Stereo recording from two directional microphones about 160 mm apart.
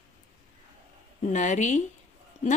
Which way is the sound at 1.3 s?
50° left (ahead or behind).